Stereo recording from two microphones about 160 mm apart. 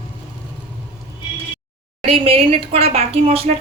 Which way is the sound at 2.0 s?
35° right (ahead or behind).